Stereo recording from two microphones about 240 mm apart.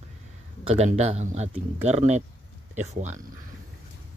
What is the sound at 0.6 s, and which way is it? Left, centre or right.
Speech, right.